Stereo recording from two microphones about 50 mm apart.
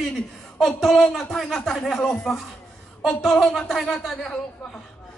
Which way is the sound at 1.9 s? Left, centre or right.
Centre.